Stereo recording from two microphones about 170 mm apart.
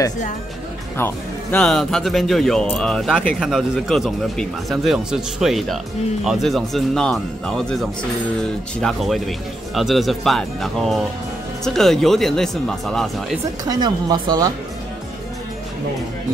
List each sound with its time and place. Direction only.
0.9 s speech: 15° left (ahead or behind)
1.6 s speech: centre (ahead or behind)
13.7 s speech: 25° right (ahead or behind)